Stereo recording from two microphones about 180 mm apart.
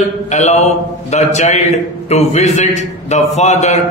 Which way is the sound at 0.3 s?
40° left (ahead or behind).